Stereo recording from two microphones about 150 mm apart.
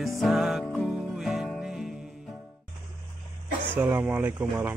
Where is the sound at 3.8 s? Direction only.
10° right (ahead or behind).